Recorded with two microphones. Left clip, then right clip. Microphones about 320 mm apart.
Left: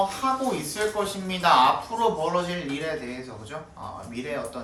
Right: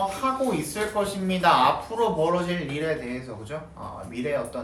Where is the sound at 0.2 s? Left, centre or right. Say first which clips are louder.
Even; centre.